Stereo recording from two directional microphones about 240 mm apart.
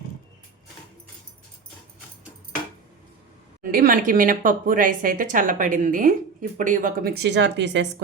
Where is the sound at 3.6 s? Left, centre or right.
Right.